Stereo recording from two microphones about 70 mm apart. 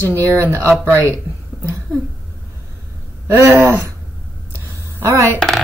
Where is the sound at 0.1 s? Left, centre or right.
Right.